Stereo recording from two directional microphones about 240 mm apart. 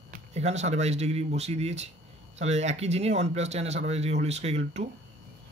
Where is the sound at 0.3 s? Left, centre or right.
Right.